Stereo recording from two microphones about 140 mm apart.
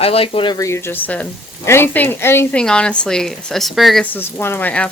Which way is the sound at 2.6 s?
5° left (ahead or behind).